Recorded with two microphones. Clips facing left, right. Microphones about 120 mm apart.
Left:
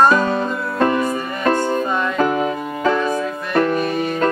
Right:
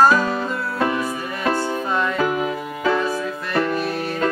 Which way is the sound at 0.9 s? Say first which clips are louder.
Left 4 dB; 50° left (ahead or behind).